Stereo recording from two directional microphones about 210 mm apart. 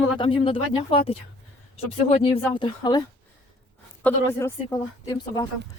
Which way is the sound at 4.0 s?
10° left (ahead or behind).